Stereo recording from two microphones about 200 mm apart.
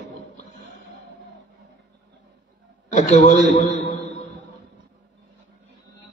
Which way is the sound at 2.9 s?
35° left (ahead or behind).